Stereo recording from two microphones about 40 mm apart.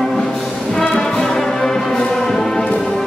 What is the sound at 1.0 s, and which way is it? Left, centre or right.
Brass instrument, centre.